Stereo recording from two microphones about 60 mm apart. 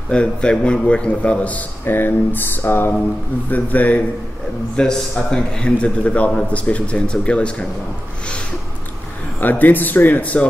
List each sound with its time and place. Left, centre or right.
0.1 s a man's voice: centre
1.9 s a man's voice: left
4.8 s a man's voice: centre
9.4 s speech: left